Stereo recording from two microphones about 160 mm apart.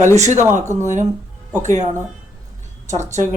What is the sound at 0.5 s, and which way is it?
Speech, 50° right (ahead or behind).